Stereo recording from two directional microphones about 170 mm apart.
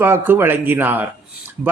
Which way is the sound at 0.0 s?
15° right (ahead or behind).